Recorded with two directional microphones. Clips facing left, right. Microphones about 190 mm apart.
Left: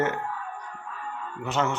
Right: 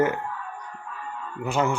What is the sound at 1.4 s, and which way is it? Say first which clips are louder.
Speech: right 3 dB; 10° right (ahead or behind).